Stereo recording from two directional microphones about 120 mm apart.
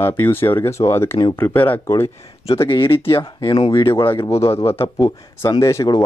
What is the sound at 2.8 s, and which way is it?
Speech, 45° left (ahead or behind).